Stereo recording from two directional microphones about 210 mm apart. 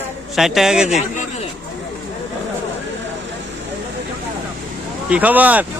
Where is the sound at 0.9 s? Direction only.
30° left (ahead or behind).